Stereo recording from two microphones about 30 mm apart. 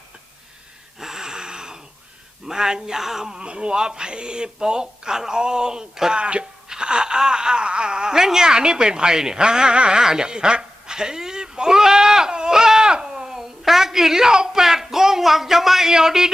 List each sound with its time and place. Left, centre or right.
0.9 s a sound: centre
2.5 s speech: right
3.2 s speech: right
6.1 s speech: right
6.7 s speech: right
10.0 s speech: centre
10.2 s bleat: right
12.3 s crying: right; by 15.9 s centre
15.9 s speech: centre